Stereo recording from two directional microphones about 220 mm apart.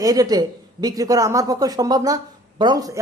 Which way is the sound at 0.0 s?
15° right (ahead or behind).